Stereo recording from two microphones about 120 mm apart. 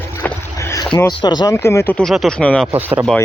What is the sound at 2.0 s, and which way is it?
Speech, 5° left (ahead or behind).